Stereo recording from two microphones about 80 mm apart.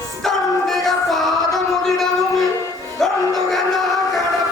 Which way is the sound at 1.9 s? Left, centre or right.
Centre.